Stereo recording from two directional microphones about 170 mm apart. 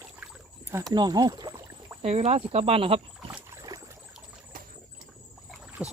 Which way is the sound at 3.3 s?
20° right (ahead or behind).